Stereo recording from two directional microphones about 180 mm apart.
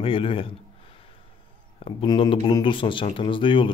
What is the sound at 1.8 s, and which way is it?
Speech, 30° left (ahead or behind).